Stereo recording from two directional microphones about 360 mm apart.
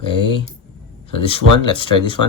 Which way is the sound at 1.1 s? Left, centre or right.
Centre.